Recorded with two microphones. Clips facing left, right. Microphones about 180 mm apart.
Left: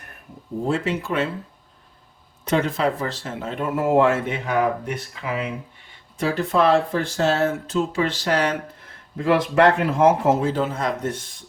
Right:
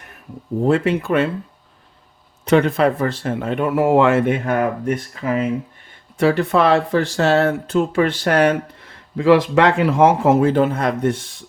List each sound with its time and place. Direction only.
0.6 s speech: 60° right (ahead or behind)
2.5 s speech: 60° right (ahead or behind); by 5.5 s 45° right (ahead or behind)
6.1 s speech: 70° right (ahead or behind)
9.1 s speech: 90° right; by 11.2 s 65° right (ahead or behind)